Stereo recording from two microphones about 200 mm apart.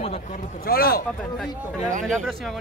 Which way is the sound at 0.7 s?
50° left (ahead or behind).